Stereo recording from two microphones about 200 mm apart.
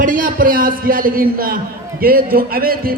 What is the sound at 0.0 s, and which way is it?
A man's voice, 40° right (ahead or behind).